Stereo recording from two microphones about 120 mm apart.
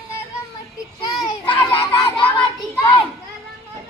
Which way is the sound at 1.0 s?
40° left (ahead or behind).